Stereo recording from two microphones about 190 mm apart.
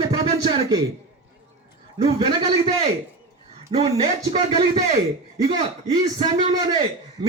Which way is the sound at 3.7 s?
35° right (ahead or behind).